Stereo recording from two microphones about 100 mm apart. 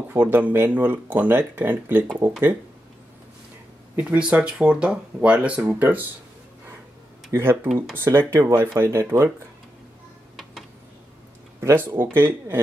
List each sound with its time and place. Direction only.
0.1 s speech: 20° right (ahead or behind)
3.9 s speech: 15° right (ahead or behind)
7.3 s speech: 25° right (ahead or behind)
7.6 s speech: centre (ahead or behind)
7.9 s speech: 25° right (ahead or behind)
11.6 s speech: 20° right (ahead or behind)